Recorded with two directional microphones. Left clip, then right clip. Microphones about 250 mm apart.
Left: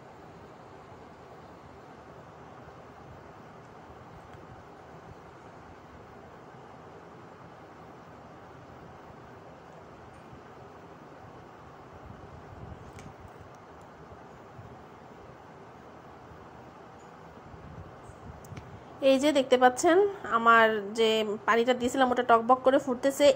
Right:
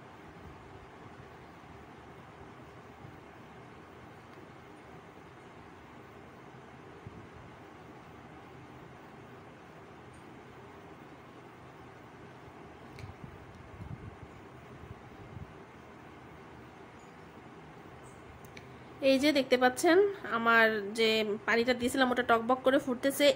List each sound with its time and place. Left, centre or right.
18.9 s a woman's voice: centre